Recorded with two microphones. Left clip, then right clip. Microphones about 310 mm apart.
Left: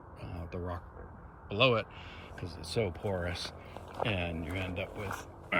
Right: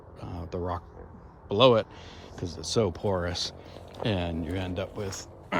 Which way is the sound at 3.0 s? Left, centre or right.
Right.